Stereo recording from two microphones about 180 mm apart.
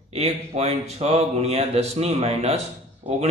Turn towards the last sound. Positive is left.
turn(degrees=-35)  # may be behind; listen again after turning